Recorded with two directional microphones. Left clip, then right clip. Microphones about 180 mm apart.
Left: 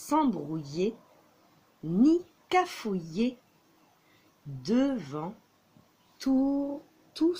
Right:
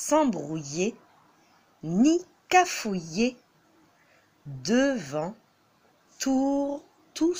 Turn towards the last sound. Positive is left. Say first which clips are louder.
# right 1 dB
turn(degrees=-20)  # may be behind; listen again after turning